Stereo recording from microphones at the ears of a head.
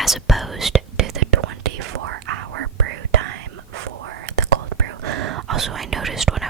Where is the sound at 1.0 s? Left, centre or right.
Right.